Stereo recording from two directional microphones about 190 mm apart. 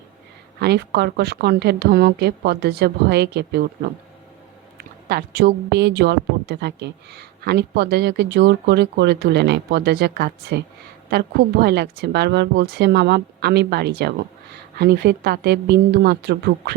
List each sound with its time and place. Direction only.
0.6 s speech: 60° right (ahead or behind)